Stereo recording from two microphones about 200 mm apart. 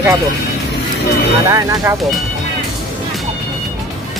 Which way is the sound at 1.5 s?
20° right (ahead or behind).